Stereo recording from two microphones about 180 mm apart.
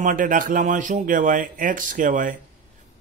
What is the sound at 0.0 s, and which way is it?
Speech, 50° right (ahead or behind).